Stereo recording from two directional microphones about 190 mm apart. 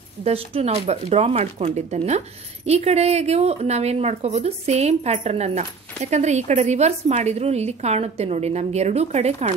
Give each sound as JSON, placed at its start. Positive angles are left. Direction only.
{"t": 0.2, "sound": "a woman's voice", "side_deg": -30}